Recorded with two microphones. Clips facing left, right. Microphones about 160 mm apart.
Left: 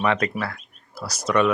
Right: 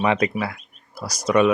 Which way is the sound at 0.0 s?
15° right (ahead or behind).